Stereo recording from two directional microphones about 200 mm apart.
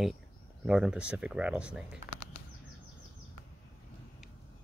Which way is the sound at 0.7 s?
5° right (ahead or behind).